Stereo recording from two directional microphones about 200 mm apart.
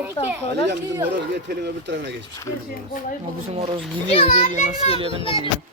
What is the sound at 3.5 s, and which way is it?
Speech, 30° right (ahead or behind).